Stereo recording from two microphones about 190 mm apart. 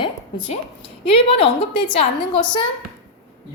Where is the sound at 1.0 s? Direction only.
30° left (ahead or behind).